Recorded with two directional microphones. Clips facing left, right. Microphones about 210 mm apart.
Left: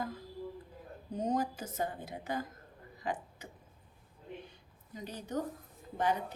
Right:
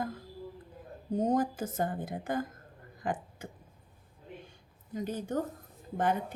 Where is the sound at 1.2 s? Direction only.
50° right (ahead or behind).